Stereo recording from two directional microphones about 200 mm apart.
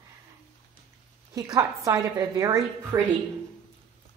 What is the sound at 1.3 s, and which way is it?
A woman's voice, 15° right (ahead or behind).